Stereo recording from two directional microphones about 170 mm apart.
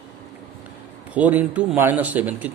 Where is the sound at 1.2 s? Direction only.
10° right (ahead or behind).